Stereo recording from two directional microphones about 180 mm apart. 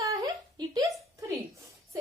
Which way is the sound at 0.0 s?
20° right (ahead or behind).